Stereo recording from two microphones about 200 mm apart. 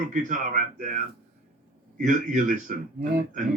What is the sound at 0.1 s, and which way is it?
Speech, 40° right (ahead or behind).